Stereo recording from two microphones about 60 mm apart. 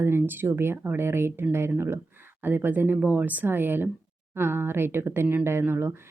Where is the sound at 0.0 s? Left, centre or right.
Right.